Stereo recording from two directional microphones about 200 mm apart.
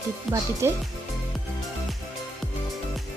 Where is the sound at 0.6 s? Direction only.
15° right (ahead or behind).